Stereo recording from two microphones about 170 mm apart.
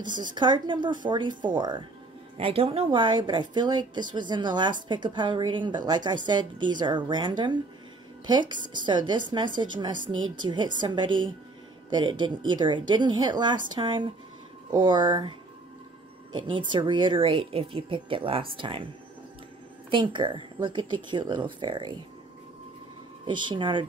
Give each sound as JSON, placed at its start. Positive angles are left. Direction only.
{"t": 0.4, "sound": "a woman's voice", "side_deg": -25}
{"t": 19.9, "sound": "a woman's voice", "side_deg": -25}
{"t": 23.2, "sound": "a woman's voice", "side_deg": -25}